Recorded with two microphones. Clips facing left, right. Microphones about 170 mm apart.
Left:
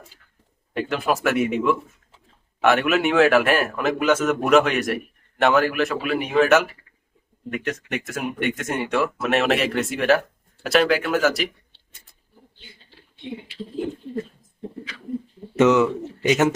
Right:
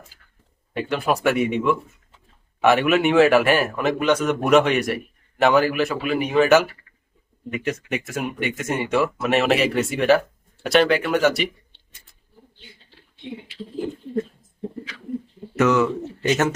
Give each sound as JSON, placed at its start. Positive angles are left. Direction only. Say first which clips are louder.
{"t": 0.7, "sound": "a man's voice", "louder": "even", "side_deg": 0}
{"t": 15.5, "sound": "speech", "louder": "left 2 dB", "side_deg": 20}